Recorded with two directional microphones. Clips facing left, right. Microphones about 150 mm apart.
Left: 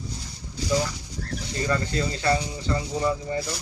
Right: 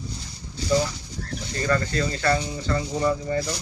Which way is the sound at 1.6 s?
15° left (ahead or behind).